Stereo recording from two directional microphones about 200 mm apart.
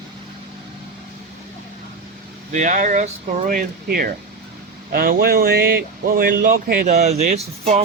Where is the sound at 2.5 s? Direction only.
40° right (ahead or behind).